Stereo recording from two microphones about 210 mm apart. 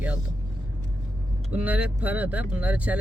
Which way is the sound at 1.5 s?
5° right (ahead or behind).